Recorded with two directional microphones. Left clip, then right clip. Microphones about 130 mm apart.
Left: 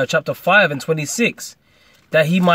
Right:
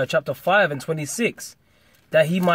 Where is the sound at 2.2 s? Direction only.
30° left (ahead or behind).